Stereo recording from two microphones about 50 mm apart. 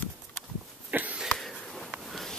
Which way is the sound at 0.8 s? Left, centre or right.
Right.